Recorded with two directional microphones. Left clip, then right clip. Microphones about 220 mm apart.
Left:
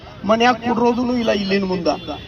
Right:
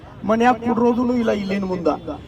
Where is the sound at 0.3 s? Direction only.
50° right (ahead or behind).